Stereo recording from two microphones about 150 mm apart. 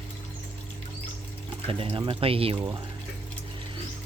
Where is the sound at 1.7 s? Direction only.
35° right (ahead or behind).